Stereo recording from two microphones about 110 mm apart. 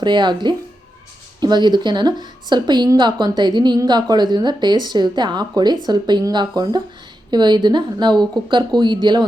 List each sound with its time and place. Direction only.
0.0 s a woman's voice: 45° right (ahead or behind)